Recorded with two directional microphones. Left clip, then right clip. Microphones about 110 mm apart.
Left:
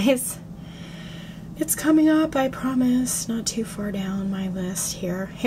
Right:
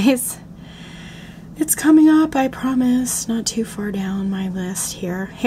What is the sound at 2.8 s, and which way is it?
Speech, 50° right (ahead or behind).